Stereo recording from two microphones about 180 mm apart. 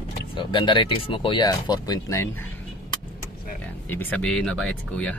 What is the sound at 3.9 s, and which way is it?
Speech, 10° left (ahead or behind).